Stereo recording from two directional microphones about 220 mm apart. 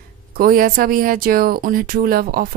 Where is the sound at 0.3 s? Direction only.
40° right (ahead or behind).